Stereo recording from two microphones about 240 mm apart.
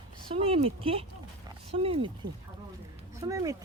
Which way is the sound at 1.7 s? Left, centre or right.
Right.